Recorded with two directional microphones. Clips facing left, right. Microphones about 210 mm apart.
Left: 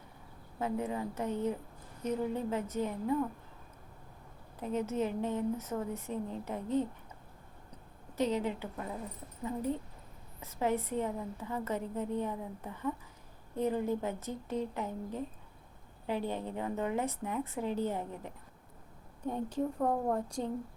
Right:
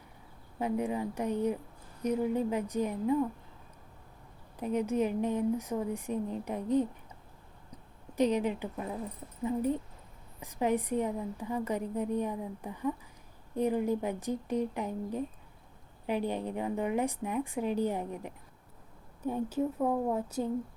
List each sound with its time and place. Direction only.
0.6 s a woman's voice: 15° right (ahead or behind)
4.6 s a woman's voice: 15° right (ahead or behind)
8.1 s a woman's voice: 15° right (ahead or behind)
19.2 s a woman's voice: 5° right (ahead or behind)